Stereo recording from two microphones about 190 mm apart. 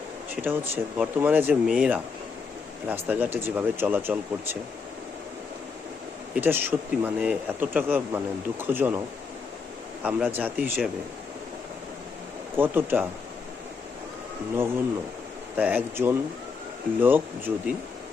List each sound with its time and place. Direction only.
0.4 s speech: 10° right (ahead or behind)
6.3 s speech: 10° right (ahead or behind)
10.0 s speech: 5° right (ahead or behind)
12.5 s speech: 10° right (ahead or behind)
15.5 s speech: 10° right (ahead or behind)